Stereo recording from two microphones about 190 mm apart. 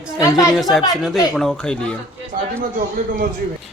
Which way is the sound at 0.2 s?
15° left (ahead or behind).